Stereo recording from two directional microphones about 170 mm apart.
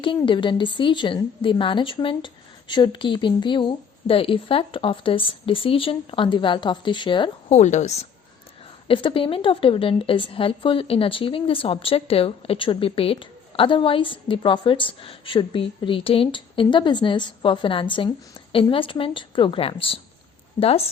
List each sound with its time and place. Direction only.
0.3 s a woman's voice: 30° left (ahead or behind)
7.5 s a woman's voice: 45° left (ahead or behind)
8.9 s a woman's voice: 30° left (ahead or behind)